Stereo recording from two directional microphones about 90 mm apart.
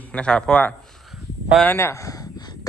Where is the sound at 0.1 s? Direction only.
10° left (ahead or behind).